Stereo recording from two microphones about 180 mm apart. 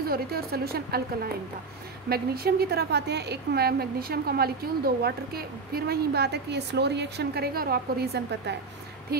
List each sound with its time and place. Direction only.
0.0 s a woman's voice: 55° right (ahead or behind)